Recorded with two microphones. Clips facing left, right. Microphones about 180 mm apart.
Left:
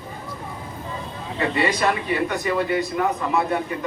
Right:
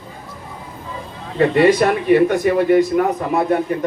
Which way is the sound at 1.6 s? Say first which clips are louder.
Right 8 dB; 50° right (ahead or behind).